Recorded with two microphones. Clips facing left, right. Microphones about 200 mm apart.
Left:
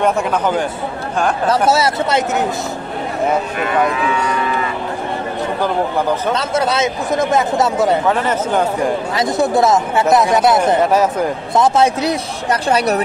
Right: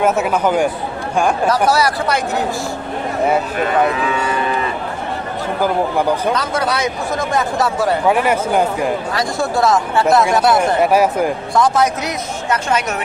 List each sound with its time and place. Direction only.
0.0 s speech: 5° right (ahead or behind)
1.5 s a man's voice: 25° left (ahead or behind)
6.3 s a man's voice: 25° left (ahead or behind)
8.1 s speech: 10° right (ahead or behind)
9.1 s a man's voice: 20° left (ahead or behind)
10.8 s speech: 10° right (ahead or behind)
11.5 s speech: 25° left (ahead or behind)